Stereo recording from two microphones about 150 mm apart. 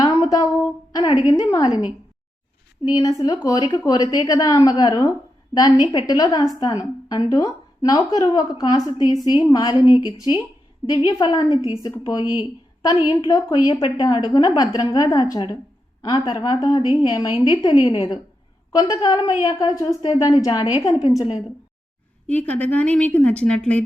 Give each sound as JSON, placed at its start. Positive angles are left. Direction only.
{"t": 0.0, "sound": "a sound", "side_deg": 25}
{"t": 0.9, "sound": "a woman's voice", "side_deg": 25}
{"t": 2.8, "sound": "a woman's voice", "side_deg": 25}
{"t": 22.3, "sound": "a woman's voice", "side_deg": 10}